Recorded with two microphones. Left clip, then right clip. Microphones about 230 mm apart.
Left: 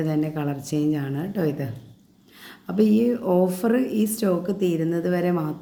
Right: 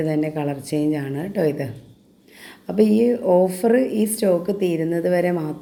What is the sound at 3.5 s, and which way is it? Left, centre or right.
Speech, left.